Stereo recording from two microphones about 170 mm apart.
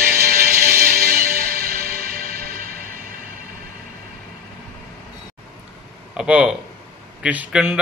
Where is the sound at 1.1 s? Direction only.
60° right (ahead or behind).